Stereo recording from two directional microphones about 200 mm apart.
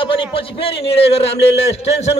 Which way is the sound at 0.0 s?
25° left (ahead or behind).